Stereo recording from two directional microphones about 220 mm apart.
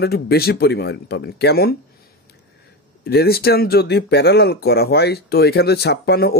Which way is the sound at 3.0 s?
45° left (ahead or behind).